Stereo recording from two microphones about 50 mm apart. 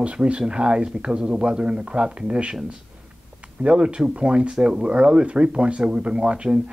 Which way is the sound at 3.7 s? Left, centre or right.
Right.